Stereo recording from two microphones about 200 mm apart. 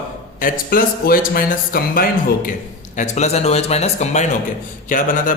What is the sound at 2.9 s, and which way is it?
A man's voice, 35° left (ahead or behind).